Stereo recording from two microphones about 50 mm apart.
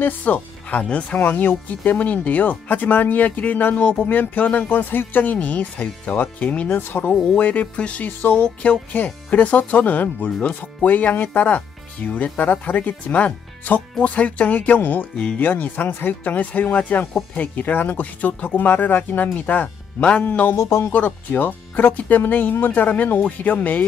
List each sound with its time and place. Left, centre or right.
0.2 s speech: left
1.1 s speech: left
6.7 s speech: left
7.3 s speech: left
20.5 s speech: left
20.9 s speech: left